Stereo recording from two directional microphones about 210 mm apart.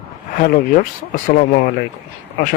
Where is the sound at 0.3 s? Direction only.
40° left (ahead or behind).